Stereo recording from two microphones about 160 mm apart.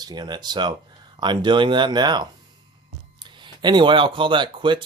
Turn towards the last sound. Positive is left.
turn(degrees=-30)  # may be behind; listen again after turning